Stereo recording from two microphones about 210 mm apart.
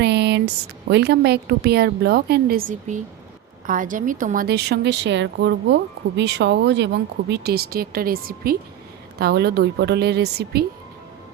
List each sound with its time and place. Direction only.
0.0 s a woman's voice: 55° right (ahead or behind)